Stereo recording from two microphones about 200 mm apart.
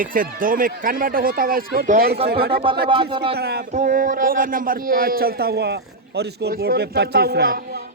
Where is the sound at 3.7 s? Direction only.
40° right (ahead or behind).